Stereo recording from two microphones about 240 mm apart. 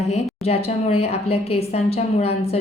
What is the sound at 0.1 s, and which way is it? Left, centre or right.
A woman's voice, left.